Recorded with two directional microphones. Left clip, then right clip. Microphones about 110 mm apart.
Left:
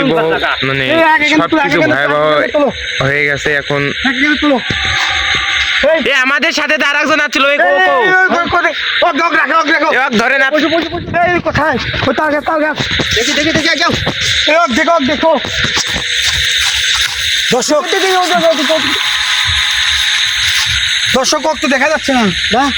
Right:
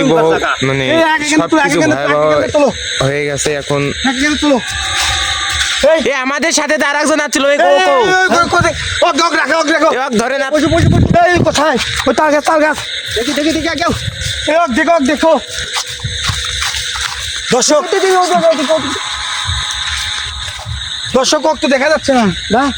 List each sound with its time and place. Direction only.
0.9 s speech: 50° left (ahead or behind)
1.7 s speech: 20° left (ahead or behind)
2.2 s speech: 15° right (ahead or behind)
5.8 s speech: 40° right (ahead or behind)
7.0 s speech: 65° right (ahead or behind)
7.9 s speech: 45° right (ahead or behind)
9.9 s speech: 15° right (ahead or behind)
12.2 s speech: 10° right (ahead or behind)
17.5 s speech: 10° left (ahead or behind)
18.2 s speech: 10° right (ahead or behind)
21.1 s speech: 75° right (ahead or behind)